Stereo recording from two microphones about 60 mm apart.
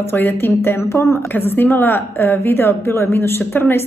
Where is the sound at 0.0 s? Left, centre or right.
Left.